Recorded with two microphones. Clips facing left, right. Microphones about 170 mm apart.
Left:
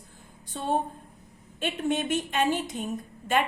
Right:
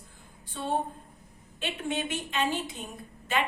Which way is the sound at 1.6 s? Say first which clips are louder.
Left 5 dB; 45° left (ahead or behind).